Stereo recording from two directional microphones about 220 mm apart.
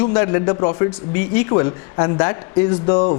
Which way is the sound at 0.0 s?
20° left (ahead or behind).